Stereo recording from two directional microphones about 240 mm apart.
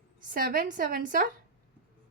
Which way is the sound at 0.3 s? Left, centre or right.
Right.